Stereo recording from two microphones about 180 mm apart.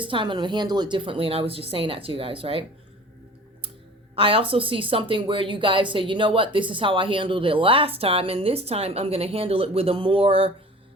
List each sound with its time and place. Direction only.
0.0 s speech: 30° right (ahead or behind)
4.1 s speech: 30° right (ahead or behind)